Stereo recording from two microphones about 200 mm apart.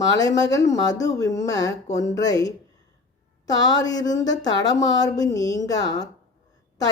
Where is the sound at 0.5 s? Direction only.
15° left (ahead or behind).